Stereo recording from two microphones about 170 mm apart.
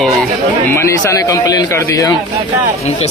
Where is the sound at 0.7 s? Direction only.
15° left (ahead or behind).